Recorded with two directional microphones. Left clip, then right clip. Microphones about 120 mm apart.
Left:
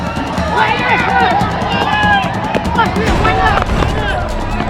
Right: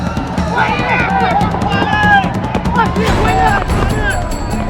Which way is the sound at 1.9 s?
30° right (ahead or behind).